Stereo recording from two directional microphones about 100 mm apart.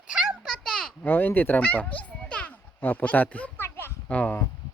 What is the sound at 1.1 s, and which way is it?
A child's voice, 20° left (ahead or behind).